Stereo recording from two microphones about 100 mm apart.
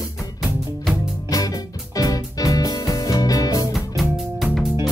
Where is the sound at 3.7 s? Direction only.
Centre (ahead or behind).